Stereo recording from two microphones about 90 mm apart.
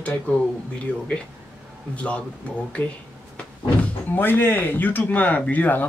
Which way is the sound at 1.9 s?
15° left (ahead or behind).